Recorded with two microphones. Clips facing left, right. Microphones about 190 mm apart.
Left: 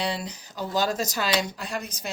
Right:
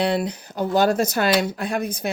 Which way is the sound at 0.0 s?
55° right (ahead or behind).